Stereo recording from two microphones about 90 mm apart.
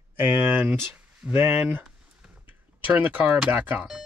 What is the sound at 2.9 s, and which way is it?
Speech, 20° right (ahead or behind).